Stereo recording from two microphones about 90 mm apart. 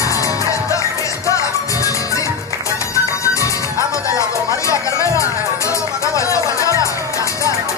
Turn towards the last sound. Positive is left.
turn(degrees=35)  # may be behind; listen again after turning